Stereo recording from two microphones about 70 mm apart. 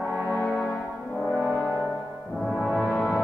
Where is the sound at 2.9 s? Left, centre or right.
Left.